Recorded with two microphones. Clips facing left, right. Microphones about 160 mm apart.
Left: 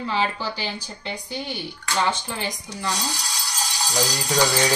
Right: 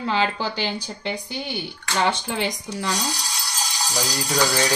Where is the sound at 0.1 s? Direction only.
70° right (ahead or behind).